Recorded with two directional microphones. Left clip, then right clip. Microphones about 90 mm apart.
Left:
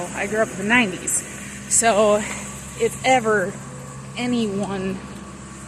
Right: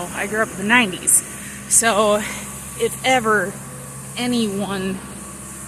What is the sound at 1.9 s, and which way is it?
Speech, 30° right (ahead or behind).